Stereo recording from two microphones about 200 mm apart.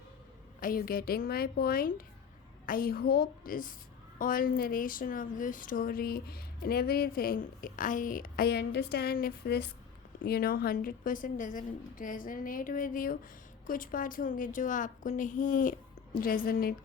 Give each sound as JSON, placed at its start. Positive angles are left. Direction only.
{"t": 0.6, "sound": "a woman's voice", "side_deg": 45}